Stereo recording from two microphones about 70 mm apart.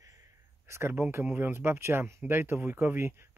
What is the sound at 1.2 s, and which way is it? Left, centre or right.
Speech, right.